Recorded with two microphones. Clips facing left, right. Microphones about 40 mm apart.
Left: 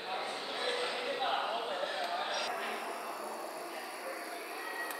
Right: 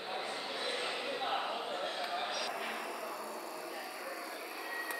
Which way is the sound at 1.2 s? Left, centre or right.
Centre.